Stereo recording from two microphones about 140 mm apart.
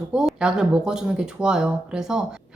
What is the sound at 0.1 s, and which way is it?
Speech, 5° right (ahead or behind).